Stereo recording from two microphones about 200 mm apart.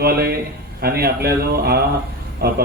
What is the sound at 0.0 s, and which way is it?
A man's voice, 50° right (ahead or behind).